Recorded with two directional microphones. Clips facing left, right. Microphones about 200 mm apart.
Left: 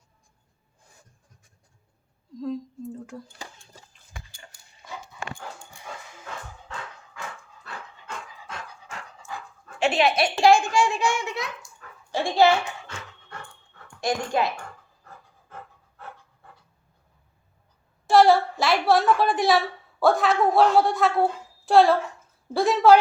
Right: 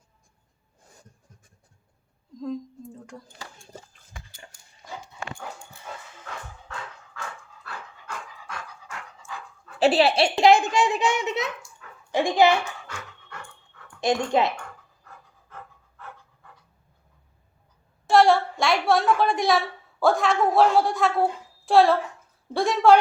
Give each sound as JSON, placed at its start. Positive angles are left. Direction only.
{"t": 2.4, "sound": "speech", "side_deg": 0}
{"t": 7.6, "sound": "dog", "side_deg": 25}
{"t": 9.7, "sound": "a child's voice", "side_deg": -35}
{"t": 11.8, "sound": "dog", "side_deg": 40}
{"t": 12.1, "sound": "a child's voice", "side_deg": -15}
{"t": 14.0, "sound": "a child's voice", "side_deg": -20}
{"t": 18.0, "sound": "a woman's voice", "side_deg": 0}